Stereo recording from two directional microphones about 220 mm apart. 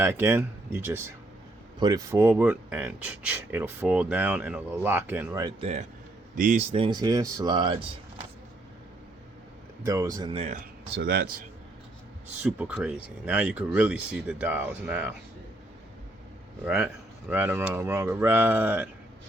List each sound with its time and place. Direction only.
0.0 s speech: 10° right (ahead or behind); by 5.8 s 25° right (ahead or behind)
6.3 s speech: 35° right (ahead or behind); by 7.8 s 20° right (ahead or behind)
9.8 s speech: 15° right (ahead or behind)
11.0 s speech: 45° right (ahead or behind)
12.4 s speech: 5° right (ahead or behind)
16.6 s speech: 5° right (ahead or behind)